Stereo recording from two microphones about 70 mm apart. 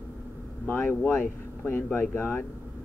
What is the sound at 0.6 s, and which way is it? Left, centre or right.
Speech, left.